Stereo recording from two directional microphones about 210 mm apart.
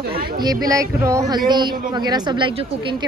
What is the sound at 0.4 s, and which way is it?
Speech, 20° right (ahead or behind).